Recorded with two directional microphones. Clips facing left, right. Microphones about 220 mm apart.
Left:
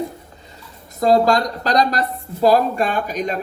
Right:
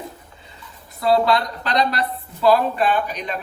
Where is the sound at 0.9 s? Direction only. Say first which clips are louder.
Left 3 dB; 45° left (ahead or behind).